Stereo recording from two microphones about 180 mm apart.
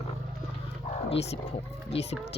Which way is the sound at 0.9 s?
40° left (ahead or behind).